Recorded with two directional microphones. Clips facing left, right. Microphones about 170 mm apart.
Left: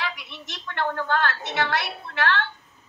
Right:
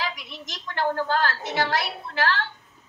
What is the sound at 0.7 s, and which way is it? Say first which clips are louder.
A woman's voice: right 1 dB; 35° right (ahead or behind).